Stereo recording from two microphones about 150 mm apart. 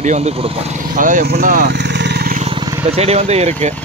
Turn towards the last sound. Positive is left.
turn(degrees=-50)  # may be behind; listen again after turning